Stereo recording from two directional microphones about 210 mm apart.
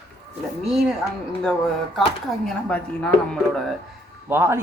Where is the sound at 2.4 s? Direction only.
5° left (ahead or behind).